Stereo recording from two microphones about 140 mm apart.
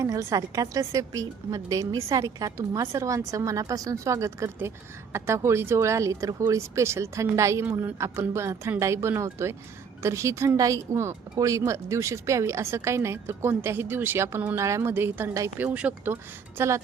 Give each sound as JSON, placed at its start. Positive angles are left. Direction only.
{"t": 0.0, "sound": "speech", "side_deg": -20}